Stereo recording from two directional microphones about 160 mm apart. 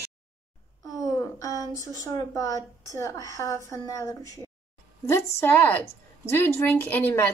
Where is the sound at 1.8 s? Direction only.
20° left (ahead or behind).